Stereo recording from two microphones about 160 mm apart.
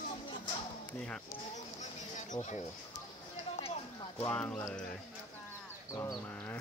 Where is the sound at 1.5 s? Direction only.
50° left (ahead or behind).